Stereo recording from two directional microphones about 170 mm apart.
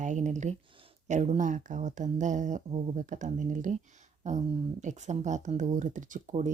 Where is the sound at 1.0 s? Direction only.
45° right (ahead or behind).